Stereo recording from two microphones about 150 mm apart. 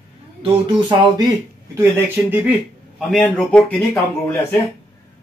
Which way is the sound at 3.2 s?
10° left (ahead or behind).